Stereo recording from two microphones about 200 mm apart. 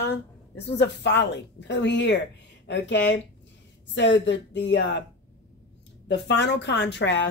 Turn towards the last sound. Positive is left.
turn(degrees=60)  # may be behind; listen again after turning